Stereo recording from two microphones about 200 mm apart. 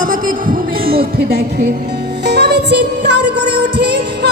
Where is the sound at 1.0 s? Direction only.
50° right (ahead or behind).